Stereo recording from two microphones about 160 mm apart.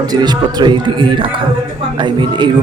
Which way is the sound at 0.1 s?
25° right (ahead or behind).